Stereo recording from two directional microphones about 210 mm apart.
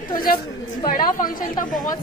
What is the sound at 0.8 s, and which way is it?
Chatter, 40° left (ahead or behind).